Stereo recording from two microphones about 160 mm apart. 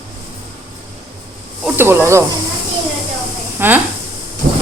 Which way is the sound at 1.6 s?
15° right (ahead or behind).